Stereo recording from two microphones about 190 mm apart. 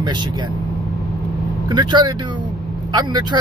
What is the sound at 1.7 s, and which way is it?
Speech, 25° right (ahead or behind).